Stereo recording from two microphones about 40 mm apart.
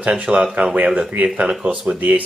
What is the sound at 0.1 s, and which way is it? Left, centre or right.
Speech, right.